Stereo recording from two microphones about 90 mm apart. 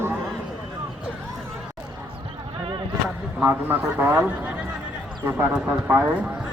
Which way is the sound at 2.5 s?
80° right.